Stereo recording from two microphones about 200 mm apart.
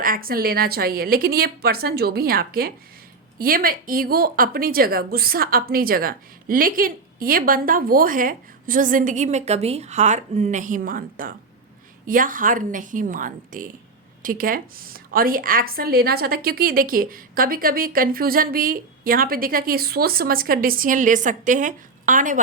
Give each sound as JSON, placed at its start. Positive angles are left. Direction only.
{"t": 0.0, "sound": "a woman's voice", "side_deg": -45}